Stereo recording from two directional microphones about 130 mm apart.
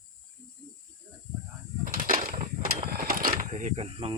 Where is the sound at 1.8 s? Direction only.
90° right.